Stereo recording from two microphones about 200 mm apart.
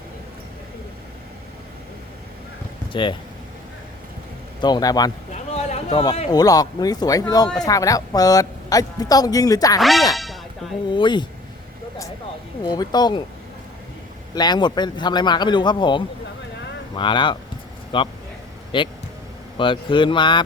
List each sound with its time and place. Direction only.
2.9 s speech: 25° left (ahead or behind)
4.6 s a man's voice: 20° left (ahead or behind)
5.3 s a sound: 35° left (ahead or behind)
6.3 s a man's voice: 20° left (ahead or behind)
9.8 s speech: centre (ahead or behind)
10.8 s a man's voice: 25° left (ahead or behind)
12.6 s a man's voice: 20° left (ahead or behind)
14.3 s a man's voice: 20° left (ahead or behind)